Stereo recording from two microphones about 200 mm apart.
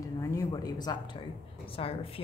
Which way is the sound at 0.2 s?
15° left (ahead or behind).